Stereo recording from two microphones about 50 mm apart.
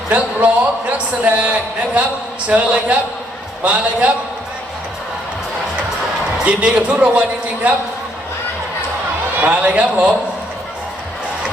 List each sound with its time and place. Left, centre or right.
0.1 s a sound: right
2.5 s a man's voice: right
6.4 s a man's voice: right
9.4 s a man's voice: right